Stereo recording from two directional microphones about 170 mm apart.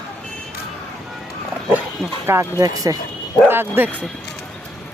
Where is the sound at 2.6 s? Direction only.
20° right (ahead or behind).